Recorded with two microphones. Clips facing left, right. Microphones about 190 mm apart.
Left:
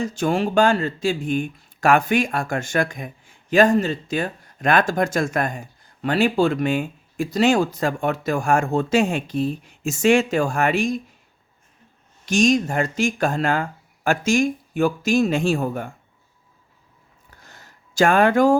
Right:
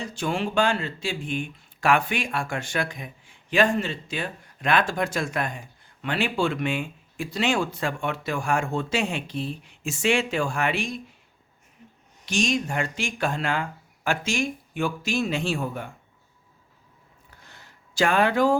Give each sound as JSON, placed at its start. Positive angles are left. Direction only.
{"t": 0.0, "sound": "speech", "side_deg": 45}
{"t": 12.2, "sound": "speech", "side_deg": 45}
{"t": 17.4, "sound": "a sound", "side_deg": 45}